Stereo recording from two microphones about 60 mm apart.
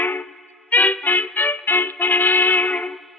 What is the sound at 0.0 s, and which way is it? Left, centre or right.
Music, left.